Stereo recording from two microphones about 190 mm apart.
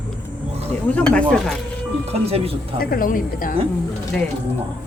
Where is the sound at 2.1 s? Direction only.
30° right (ahead or behind).